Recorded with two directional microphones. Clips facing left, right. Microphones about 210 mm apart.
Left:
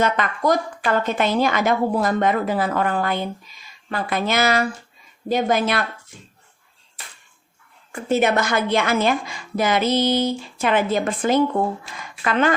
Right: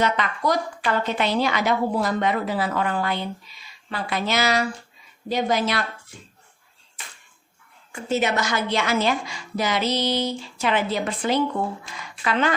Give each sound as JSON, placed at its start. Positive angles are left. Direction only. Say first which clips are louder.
{"t": 0.0, "sound": "a woman's voice", "louder": "left 3 dB", "side_deg": 50}
{"t": 7.9, "sound": "a woman's voice", "louder": "left 4 dB", "side_deg": 55}